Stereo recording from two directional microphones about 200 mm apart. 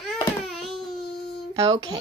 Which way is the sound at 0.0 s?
Centre (ahead or behind).